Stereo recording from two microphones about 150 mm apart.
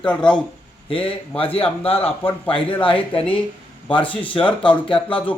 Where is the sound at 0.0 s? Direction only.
5° left (ahead or behind).